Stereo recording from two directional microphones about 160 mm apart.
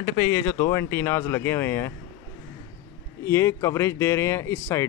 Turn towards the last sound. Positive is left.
turn(degrees=15)  # may be behind; listen again after turning